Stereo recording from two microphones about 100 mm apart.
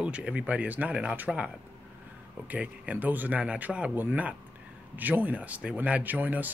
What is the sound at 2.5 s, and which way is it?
Speech, 15° right (ahead or behind).